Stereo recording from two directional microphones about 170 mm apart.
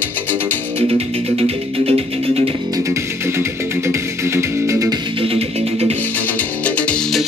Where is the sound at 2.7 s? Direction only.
15° right (ahead or behind).